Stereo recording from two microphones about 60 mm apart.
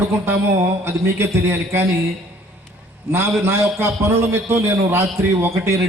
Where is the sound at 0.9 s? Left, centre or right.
Right.